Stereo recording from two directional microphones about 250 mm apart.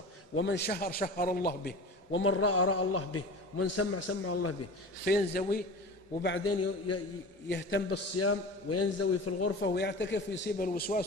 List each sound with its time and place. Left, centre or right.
0.3 s a man's voice: left
2.2 s a man's voice: left
5.0 s a man's voice: left
6.2 s a man's voice: left
6.9 s a man's voice: left
7.4 s a man's voice: left
7.9 s a man's voice: left
9.6 s a man's voice: left